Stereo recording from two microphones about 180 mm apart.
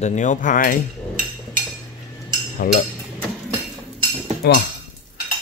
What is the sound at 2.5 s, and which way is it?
Speech, 55° left (ahead or behind).